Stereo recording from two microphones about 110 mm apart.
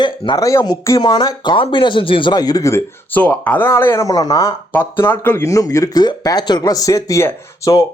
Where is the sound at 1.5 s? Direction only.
50° left (ahead or behind).